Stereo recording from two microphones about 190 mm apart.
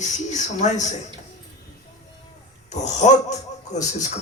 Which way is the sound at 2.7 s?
40° left (ahead or behind).